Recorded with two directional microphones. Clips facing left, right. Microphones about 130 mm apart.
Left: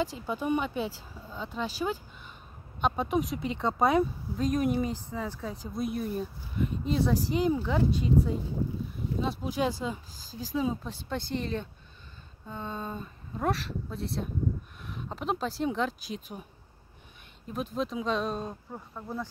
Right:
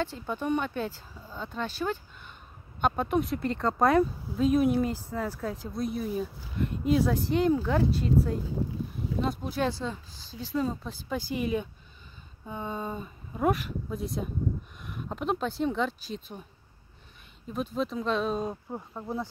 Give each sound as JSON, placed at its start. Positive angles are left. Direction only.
{"t": 0.0, "sound": "speech", "side_deg": 10}
{"t": 17.7, "sound": "speech", "side_deg": 0}
{"t": 18.5, "sound": "speech", "side_deg": -20}